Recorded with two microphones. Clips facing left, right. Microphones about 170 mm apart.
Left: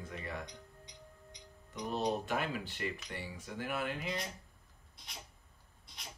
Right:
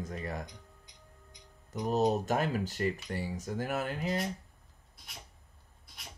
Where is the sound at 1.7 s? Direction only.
45° right (ahead or behind).